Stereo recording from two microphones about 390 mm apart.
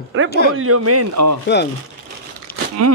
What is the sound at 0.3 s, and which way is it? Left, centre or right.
Speech, left.